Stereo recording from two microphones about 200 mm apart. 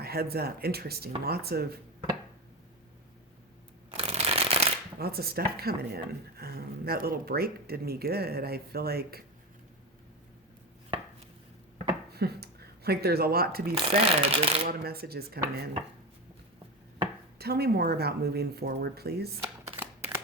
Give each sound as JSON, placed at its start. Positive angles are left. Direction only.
{"t": 0.0, "sound": "speech", "side_deg": -50}
{"t": 3.9, "sound": "shuffling cards", "side_deg": -30}
{"t": 4.9, "sound": "speech", "side_deg": -50}
{"t": 12.1, "sound": "speech", "side_deg": -50}
{"t": 13.8, "sound": "speech", "side_deg": -30}
{"t": 14.7, "sound": "speech", "side_deg": -50}
{"t": 17.3, "sound": "speech", "side_deg": -50}
{"t": 19.4, "sound": "shuffling cards", "side_deg": -10}